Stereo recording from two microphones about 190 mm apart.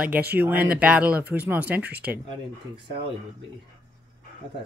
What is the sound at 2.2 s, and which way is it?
Speech, 25° right (ahead or behind).